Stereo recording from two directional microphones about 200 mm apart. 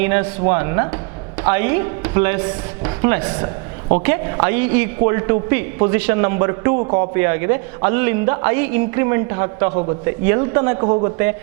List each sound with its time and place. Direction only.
0.0 s a man's voice: 15° right (ahead or behind)
10.8 s a man's voice: 30° right (ahead or behind)